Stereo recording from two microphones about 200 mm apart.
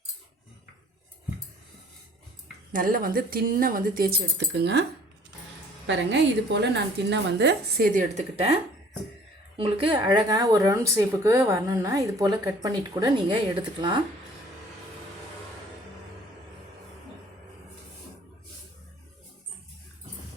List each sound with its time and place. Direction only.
2.7 s speech: 45° right (ahead or behind)
5.8 s a woman's voice: 65° right (ahead or behind)
7.9 s a woman's voice: 35° right (ahead or behind)
9.6 s speech: 25° right (ahead or behind)